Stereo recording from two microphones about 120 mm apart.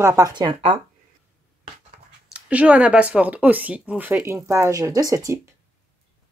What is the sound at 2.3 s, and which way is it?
Speech, 10° right (ahead or behind).